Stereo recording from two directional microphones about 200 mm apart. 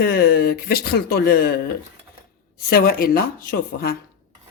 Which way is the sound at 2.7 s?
50° left (ahead or behind).